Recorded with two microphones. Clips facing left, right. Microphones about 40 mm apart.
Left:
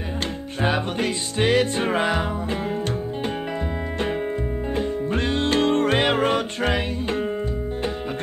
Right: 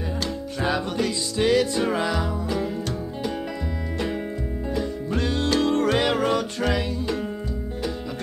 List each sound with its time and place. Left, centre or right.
0.6 s music: left
4.7 s music: left